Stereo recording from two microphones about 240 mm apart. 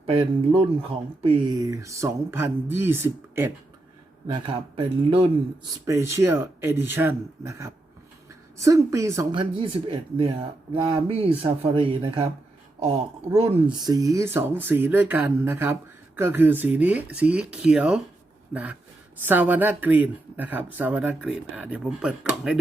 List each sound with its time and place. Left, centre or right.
0.0 s speech: right
5.8 s speech: centre